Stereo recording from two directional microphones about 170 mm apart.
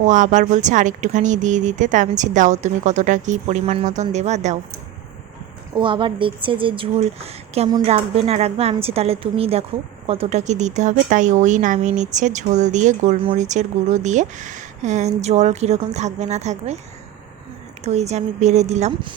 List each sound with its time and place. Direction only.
0.0 s speech: 45° right (ahead or behind)
5.7 s speech: 30° right (ahead or behind)
17.8 s speech: 40° right (ahead or behind)